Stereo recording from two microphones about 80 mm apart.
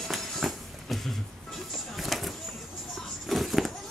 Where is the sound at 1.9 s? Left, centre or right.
Centre.